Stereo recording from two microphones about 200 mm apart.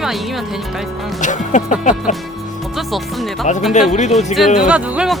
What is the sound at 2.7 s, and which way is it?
Music, centre (ahead or behind).